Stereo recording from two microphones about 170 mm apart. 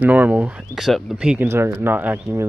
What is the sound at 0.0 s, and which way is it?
Speech, 10° right (ahead or behind).